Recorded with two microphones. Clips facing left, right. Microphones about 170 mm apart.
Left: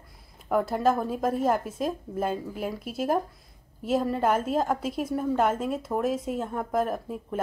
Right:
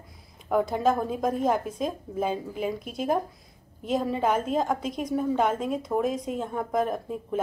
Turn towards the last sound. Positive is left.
turn(degrees=0)  # may be behind; listen again after turning